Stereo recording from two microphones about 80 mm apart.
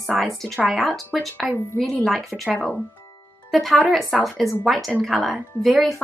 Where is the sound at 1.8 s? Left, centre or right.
Centre.